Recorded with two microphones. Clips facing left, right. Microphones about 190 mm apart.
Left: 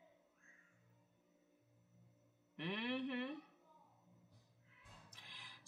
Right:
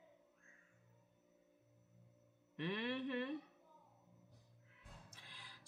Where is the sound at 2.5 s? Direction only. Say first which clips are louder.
Right 1 dB; 10° left (ahead or behind).